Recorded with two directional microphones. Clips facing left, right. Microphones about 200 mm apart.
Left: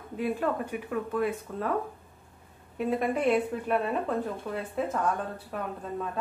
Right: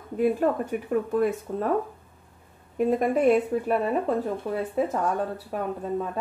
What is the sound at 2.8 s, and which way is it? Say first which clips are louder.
Speech: right 5 dB; 45° right (ahead or behind).